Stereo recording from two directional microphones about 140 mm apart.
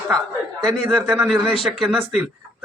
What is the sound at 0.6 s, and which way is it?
Speech, centre (ahead or behind).